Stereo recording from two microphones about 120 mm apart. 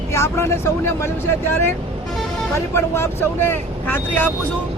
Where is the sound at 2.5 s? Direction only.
20° left (ahead or behind).